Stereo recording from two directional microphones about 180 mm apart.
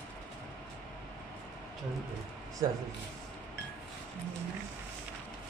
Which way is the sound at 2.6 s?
20° right (ahead or behind).